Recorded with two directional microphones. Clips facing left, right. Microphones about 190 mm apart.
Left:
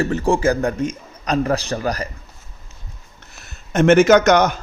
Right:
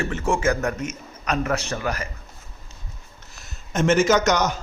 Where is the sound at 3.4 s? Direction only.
60° left (ahead or behind).